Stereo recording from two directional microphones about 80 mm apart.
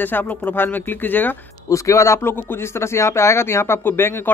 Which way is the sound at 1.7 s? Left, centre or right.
Left.